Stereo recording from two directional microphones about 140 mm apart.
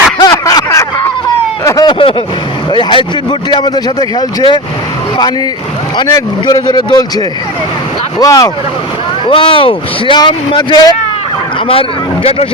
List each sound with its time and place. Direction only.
0.2 s a sound: 25° left (ahead or behind)
2.7 s speech: 35° left (ahead or behind)
6.4 s a man's voice: 30° left (ahead or behind)
9.2 s speech: 40° left (ahead or behind)